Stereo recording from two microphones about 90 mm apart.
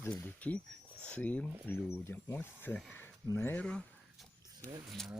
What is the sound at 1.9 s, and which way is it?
Speech, 25° left (ahead or behind).